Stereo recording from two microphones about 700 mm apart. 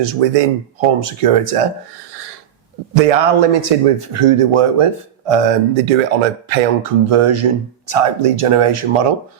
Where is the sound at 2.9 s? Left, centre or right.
Right.